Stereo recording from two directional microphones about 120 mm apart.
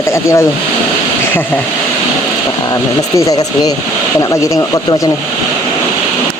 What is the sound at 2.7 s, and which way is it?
Speech, 30° left (ahead or behind).